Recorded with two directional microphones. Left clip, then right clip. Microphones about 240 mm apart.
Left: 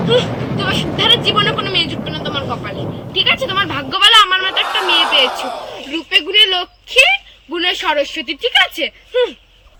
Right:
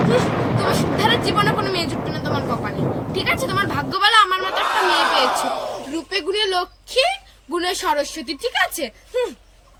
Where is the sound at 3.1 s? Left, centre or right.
Centre.